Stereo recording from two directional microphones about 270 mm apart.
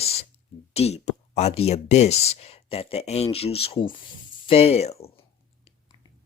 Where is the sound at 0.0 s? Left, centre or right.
Left.